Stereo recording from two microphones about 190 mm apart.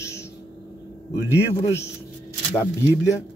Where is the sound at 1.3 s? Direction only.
15° left (ahead or behind).